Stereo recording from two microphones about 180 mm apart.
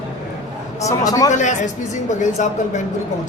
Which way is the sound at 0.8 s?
20° left (ahead or behind).